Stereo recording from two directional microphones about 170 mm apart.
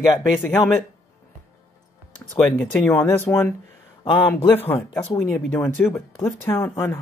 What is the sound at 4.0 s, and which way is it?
Speech, 25° left (ahead or behind).